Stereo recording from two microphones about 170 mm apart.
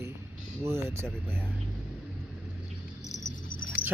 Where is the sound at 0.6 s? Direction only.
15° right (ahead or behind).